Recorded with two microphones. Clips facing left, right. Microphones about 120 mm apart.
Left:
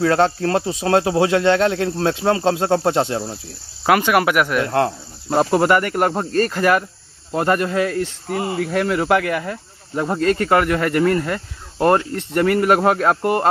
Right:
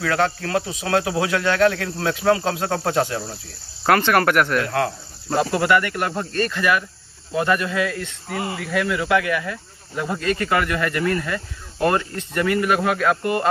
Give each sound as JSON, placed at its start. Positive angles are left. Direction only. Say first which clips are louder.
{"t": 0.0, "sound": "speech", "louder": "left 5 dB", "side_deg": 30}
{"t": 3.8, "sound": "speech", "louder": "left 1 dB", "side_deg": 10}
{"t": 4.6, "sound": "speech", "louder": "left 4 dB", "side_deg": 30}